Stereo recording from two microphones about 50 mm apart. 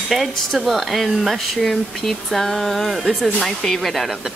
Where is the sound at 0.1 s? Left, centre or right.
Centre.